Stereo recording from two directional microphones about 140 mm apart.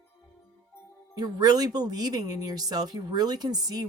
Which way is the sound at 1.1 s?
25° right (ahead or behind).